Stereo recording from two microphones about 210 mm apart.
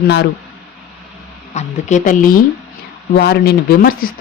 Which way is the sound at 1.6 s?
35° left (ahead or behind).